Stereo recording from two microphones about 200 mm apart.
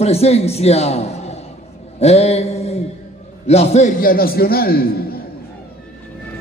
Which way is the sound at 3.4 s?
30° left (ahead or behind).